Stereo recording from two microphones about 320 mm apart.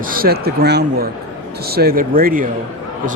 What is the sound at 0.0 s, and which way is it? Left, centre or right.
A man's voice, right.